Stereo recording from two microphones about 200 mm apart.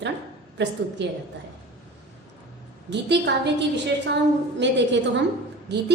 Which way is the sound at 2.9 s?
60° right (ahead or behind).